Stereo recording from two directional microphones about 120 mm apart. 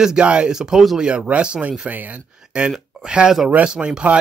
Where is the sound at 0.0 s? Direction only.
5° right (ahead or behind).